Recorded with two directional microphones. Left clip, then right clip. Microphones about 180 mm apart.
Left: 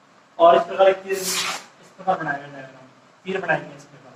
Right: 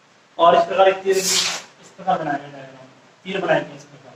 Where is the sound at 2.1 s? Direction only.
15° right (ahead or behind).